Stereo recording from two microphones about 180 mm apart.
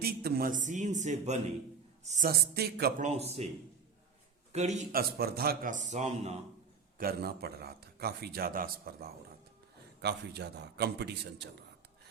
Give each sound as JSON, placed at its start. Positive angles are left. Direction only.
{"t": 0.0, "sound": "a man's voice", "side_deg": -60}
{"t": 2.4, "sound": "a man's voice", "side_deg": -60}
{"t": 3.0, "sound": "speech", "side_deg": -35}
{"t": 4.5, "sound": "speech", "side_deg": -40}
{"t": 4.9, "sound": "a man's voice", "side_deg": -60}
{"t": 7.0, "sound": "a man's voice", "side_deg": -60}
{"t": 10.0, "sound": "a man's voice", "side_deg": -65}